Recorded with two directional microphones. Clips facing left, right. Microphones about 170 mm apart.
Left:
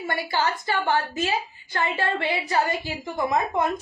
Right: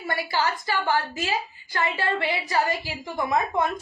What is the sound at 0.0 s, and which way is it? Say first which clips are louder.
A woman's voice: left 1 dB; 20° left (ahead or behind).